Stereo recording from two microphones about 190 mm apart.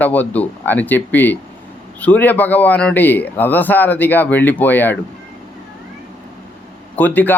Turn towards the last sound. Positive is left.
turn(degrees=10)  # may be behind; listen again after turning